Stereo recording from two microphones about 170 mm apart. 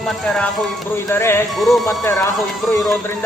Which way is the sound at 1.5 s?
Centre (ahead or behind).